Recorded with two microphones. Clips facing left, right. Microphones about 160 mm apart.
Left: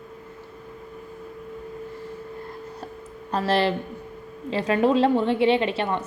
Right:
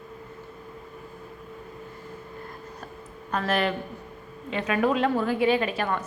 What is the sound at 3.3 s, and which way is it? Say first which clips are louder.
A woman's voice: left 3 dB; 30° left (ahead or behind).